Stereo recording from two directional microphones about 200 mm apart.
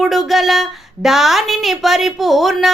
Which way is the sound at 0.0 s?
Centre (ahead or behind).